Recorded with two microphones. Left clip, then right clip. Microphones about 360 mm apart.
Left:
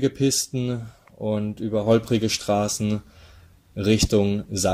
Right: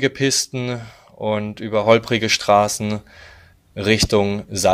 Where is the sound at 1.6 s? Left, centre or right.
Centre.